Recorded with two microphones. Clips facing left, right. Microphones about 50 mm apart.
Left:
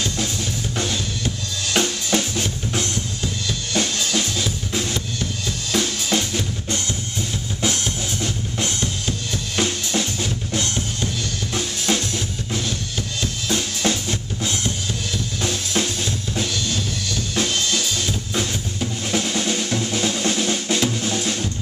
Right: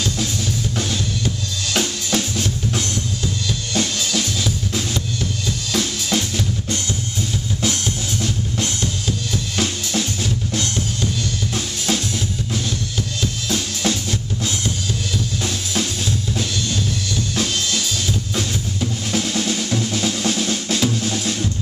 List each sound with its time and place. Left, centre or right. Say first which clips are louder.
1.7 s drum kit: left 1 dB; centre
13.2 s drum kit: left 1 dB; centre
17.4 s drum: left 2 dB; centre